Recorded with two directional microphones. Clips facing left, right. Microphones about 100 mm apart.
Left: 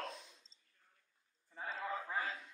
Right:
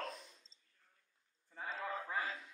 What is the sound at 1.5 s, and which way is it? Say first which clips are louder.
Speech: left 1 dB; centre (ahead or behind).